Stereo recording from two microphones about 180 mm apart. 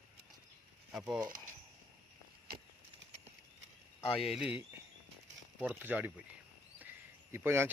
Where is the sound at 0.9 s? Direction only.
5° right (ahead or behind).